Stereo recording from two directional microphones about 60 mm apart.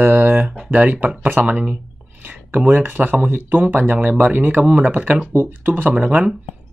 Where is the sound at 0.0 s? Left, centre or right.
Right.